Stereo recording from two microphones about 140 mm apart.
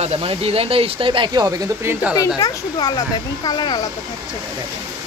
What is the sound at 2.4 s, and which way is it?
Speech, 30° left (ahead or behind).